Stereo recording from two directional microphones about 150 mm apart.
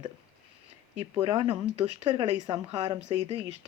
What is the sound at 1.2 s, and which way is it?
Speech, 40° right (ahead or behind).